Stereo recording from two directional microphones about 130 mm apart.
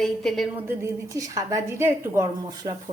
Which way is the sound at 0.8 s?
25° right (ahead or behind).